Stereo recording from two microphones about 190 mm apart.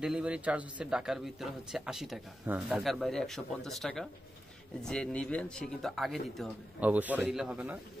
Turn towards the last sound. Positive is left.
turn(degrees=-5)  # may be behind; listen again after turning